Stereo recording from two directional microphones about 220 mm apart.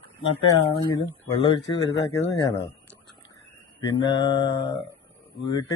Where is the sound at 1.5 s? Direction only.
15° left (ahead or behind).